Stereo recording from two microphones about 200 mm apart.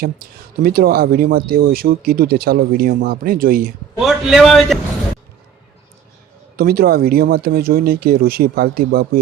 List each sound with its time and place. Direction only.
0.0 s speech: 45° right (ahead or behind)
4.0 s a man's voice: centre (ahead or behind)
6.6 s speech: 50° right (ahead or behind)